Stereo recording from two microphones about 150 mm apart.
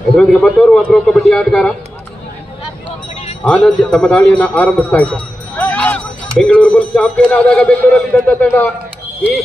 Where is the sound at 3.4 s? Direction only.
5° left (ahead or behind).